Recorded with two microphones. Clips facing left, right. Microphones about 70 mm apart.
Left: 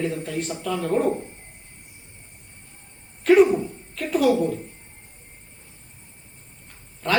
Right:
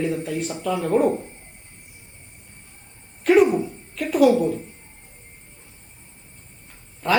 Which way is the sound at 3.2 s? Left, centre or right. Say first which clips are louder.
Left 1 dB; centre.